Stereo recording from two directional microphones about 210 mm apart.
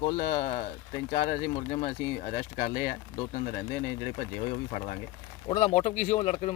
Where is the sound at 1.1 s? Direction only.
40° left (ahead or behind).